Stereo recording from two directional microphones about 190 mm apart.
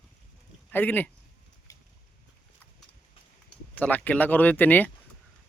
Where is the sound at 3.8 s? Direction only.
10° left (ahead or behind).